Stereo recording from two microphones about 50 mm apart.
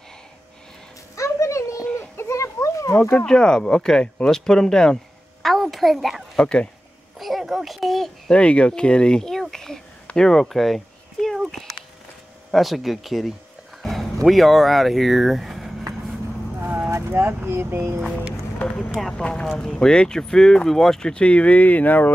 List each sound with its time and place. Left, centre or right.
1.1 s a sound: left
2.0 s a sound: left
3.3 s speech: centre
5.4 s a sound: centre
6.3 s speech: centre
7.2 s a child's voice: centre
8.3 s speech: left; by 11.3 s centre
12.5 s a child's voice: centre
17.1 s speech: right
18.9 s a child's voice: centre
19.6 s speech: centre
21.1 s speech: left